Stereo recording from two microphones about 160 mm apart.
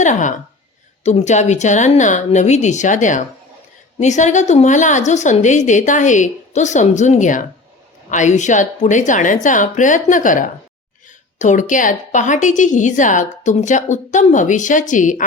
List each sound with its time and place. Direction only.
0.0 s a woman's voice: 50° left (ahead or behind)